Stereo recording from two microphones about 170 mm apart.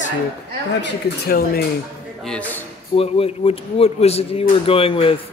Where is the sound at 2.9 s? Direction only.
35° left (ahead or behind).